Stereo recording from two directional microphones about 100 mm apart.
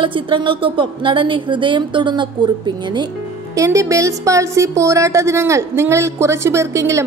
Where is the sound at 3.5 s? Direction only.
30° right (ahead or behind).